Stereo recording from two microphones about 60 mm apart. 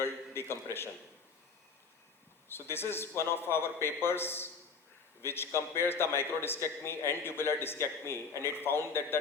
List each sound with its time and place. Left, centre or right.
0.0 s a man's voice: left
2.5 s a man's voice: left